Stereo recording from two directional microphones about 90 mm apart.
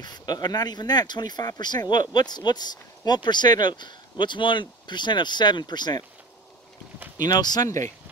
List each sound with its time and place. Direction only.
0.0 s speech: 50° left (ahead or behind)
7.2 s speech: 50° left (ahead or behind)